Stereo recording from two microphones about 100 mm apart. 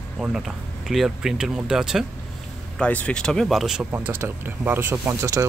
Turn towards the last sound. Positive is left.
turn(degrees=-30)  # may be behind; listen again after turning